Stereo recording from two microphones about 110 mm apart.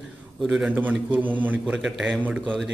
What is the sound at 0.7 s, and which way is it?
A man's voice, 15° right (ahead or behind).